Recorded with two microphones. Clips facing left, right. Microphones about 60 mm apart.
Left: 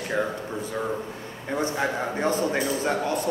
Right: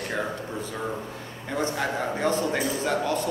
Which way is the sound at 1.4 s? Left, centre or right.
Centre.